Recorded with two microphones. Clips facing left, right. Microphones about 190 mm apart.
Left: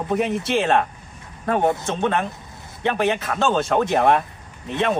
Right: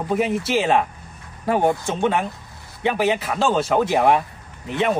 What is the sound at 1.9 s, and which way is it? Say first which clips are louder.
Speech: right 1 dB; 10° right (ahead or behind).